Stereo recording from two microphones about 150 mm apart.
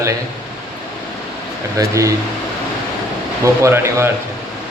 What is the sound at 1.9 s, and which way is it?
Speech, 20° right (ahead or behind).